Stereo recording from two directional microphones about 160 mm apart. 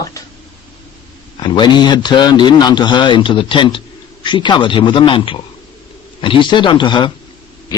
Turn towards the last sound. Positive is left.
turn(degrees=30)  # may be behind; listen again after turning